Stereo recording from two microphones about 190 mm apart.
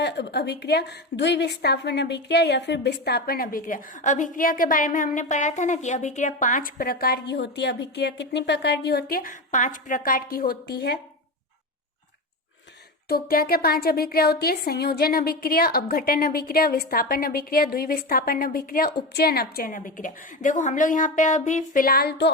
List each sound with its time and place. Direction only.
0.0 s a woman's voice: 65° left (ahead or behind)
13.1 s a woman's voice: 50° left (ahead or behind)